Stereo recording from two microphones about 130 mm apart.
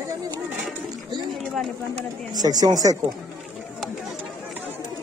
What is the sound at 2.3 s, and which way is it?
Speech, 30° right (ahead or behind).